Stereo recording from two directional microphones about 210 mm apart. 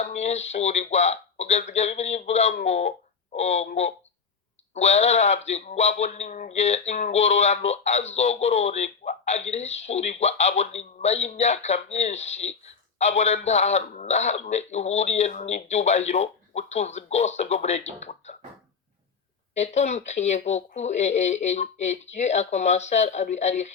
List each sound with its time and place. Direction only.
0.0 s a man's voice: 30° left (ahead or behind)
19.5 s a man's voice: 30° left (ahead or behind)